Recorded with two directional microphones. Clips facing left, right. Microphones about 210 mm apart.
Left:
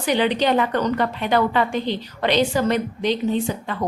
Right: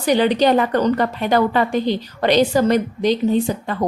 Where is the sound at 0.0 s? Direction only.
40° right (ahead or behind).